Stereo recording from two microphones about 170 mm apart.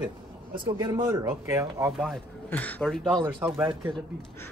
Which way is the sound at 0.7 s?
20° right (ahead or behind).